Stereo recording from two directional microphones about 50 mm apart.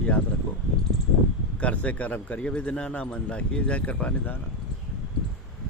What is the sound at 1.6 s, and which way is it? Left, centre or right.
Speech, left.